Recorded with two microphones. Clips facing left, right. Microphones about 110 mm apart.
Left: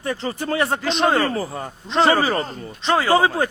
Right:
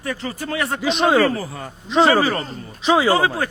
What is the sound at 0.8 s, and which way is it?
Speech, centre (ahead or behind).